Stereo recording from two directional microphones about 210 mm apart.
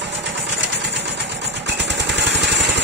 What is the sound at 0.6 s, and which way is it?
Vehicle, 55° right (ahead or behind).